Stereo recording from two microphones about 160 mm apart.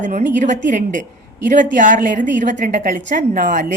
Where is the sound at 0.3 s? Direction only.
50° right (ahead or behind).